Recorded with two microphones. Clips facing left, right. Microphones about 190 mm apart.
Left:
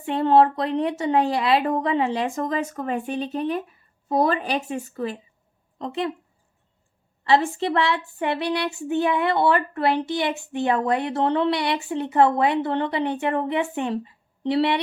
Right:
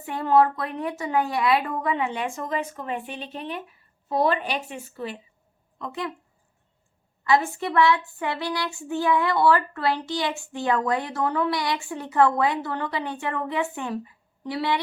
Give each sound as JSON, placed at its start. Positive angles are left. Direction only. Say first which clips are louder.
{"t": 0.0, "sound": "speech", "louder": "left 3 dB", "side_deg": 30}
{"t": 5.8, "sound": "speech", "louder": "left 5 dB", "side_deg": 25}
{"t": 7.3, "sound": "speech", "louder": "left 2 dB", "side_deg": 30}